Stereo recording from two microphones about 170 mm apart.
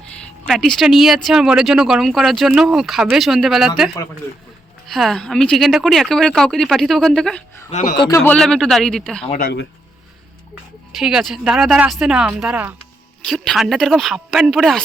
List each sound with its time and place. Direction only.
0.4 s speech: centre (ahead or behind)
4.9 s speech: centre (ahead or behind)
7.7 s speech: 45° left (ahead or behind)
7.9 s a man's voice: 25° left (ahead or behind)
8.2 s speech: 5° left (ahead or behind)
9.4 s speech: 85° left
10.9 s speech: centre (ahead or behind)